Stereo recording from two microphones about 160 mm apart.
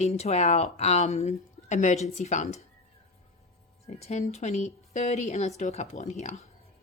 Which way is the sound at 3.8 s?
45° left (ahead or behind).